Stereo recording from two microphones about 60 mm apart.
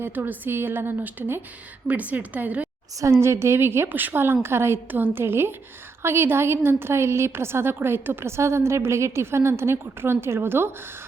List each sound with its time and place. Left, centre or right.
0.0 s a woman's voice: right
1.9 s speech: right
3.0 s a woman's voice: right